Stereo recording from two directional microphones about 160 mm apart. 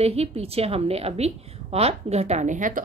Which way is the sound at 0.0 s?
40° right (ahead or behind).